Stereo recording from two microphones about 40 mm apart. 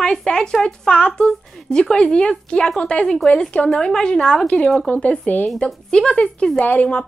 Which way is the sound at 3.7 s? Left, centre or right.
Centre.